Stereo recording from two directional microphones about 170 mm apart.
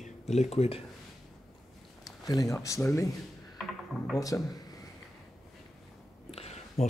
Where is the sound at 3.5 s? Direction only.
Centre (ahead or behind).